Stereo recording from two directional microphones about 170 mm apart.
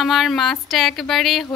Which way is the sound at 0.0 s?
Centre (ahead or behind).